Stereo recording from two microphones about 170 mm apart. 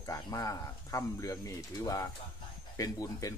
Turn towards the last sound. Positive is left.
turn(degrees=20)  # may be behind; listen again after turning